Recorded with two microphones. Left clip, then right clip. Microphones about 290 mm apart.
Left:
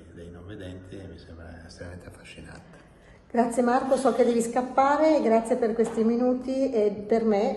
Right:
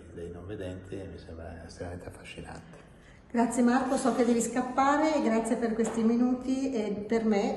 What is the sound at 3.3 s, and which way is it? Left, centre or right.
Speech, centre.